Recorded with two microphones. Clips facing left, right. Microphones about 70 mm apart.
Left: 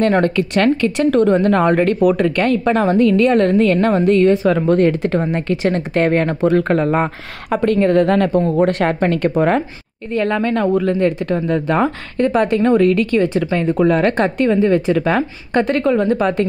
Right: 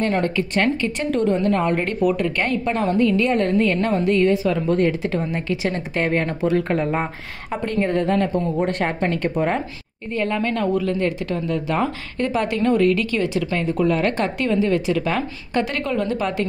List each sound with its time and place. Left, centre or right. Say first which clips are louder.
0.0 s speech: left 6 dB; left